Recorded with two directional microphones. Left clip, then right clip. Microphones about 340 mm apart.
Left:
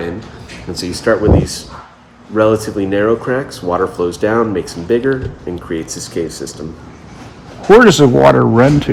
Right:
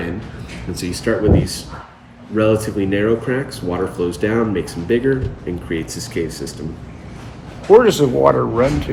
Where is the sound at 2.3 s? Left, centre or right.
Centre.